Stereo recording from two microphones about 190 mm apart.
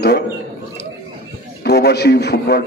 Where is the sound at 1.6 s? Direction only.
60° left (ahead or behind).